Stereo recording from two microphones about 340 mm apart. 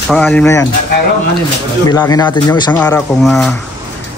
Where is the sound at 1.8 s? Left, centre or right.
Centre.